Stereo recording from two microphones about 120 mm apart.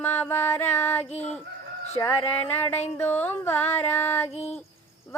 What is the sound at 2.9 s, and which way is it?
Speech, 15° left (ahead or behind).